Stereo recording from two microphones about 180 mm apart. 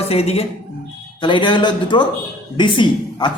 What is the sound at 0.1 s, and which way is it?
A woman's voice, 35° left (ahead or behind).